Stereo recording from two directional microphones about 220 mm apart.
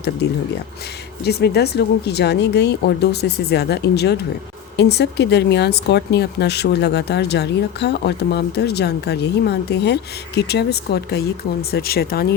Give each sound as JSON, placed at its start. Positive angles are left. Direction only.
{"t": 1.2, "sound": "speech", "side_deg": 50}